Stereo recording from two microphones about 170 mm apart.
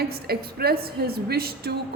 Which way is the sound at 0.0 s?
65° right (ahead or behind).